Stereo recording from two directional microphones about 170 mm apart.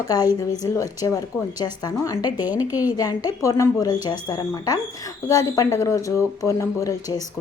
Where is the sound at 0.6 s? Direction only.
20° left (ahead or behind).